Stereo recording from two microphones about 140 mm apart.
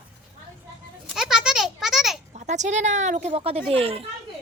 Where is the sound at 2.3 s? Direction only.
55° right (ahead or behind).